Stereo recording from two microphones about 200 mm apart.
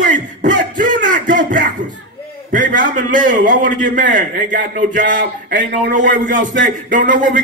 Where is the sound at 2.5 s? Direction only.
40° right (ahead or behind).